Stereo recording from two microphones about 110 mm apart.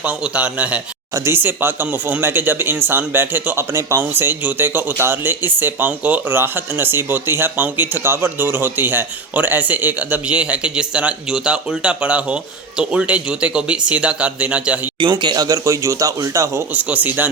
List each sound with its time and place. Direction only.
0.0 s speech: 10° right (ahead or behind)
1.1 s speech: 25° right (ahead or behind)
15.0 s speech: 45° right (ahead or behind)
16.7 s speech: 15° right (ahead or behind)